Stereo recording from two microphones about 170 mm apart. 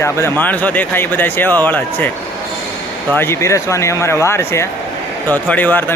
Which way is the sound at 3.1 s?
15° left (ahead or behind).